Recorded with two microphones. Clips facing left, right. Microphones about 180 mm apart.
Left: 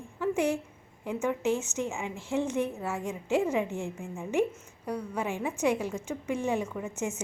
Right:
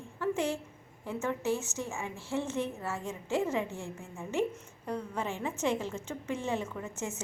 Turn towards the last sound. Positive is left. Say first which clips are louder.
# left 4 dB
turn(degrees=15)  # may be behind; listen again after turning